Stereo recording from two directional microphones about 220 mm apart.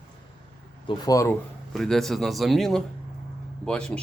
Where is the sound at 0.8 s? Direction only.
15° left (ahead or behind).